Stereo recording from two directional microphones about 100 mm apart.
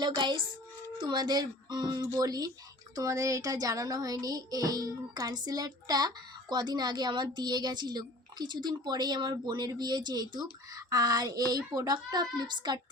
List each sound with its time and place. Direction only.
0.0 s music: 50° right (ahead or behind)
2.1 s speech: 40° right (ahead or behind)
2.9 s music: 35° right (ahead or behind)